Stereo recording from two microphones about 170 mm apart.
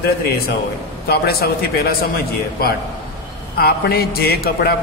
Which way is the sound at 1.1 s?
70° left (ahead or behind).